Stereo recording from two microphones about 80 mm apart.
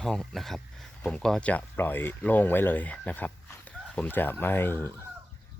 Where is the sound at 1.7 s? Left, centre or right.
Left.